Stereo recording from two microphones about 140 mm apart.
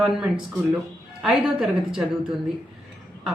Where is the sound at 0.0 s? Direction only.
5° right (ahead or behind).